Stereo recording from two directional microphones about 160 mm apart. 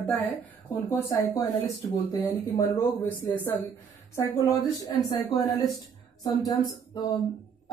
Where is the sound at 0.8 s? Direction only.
20° left (ahead or behind).